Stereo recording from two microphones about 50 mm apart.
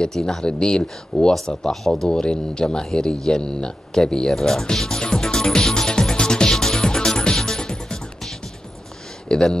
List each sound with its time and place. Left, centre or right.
0.0 s speech: centre
2.0 s speech: centre
5.0 s music: centre
9.3 s speech: centre